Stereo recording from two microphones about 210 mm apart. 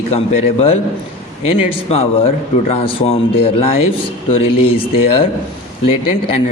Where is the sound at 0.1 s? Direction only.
30° left (ahead or behind).